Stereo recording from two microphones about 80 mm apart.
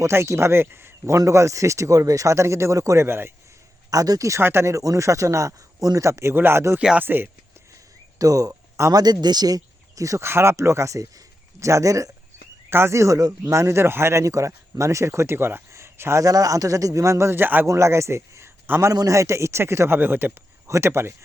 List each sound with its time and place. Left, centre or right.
0.0 s speech: right
1.1 s speech: right
3.8 s speech: right
6.7 s speech: centre
7.0 s speech: right
8.2 s speech: right
10.2 s speech: right
12.7 s speech: right
16.2 s speech: right
17.7 s a man's voice: right
20.7 s speech: right